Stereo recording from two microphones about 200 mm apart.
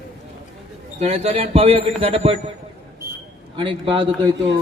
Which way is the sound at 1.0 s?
30° right (ahead or behind).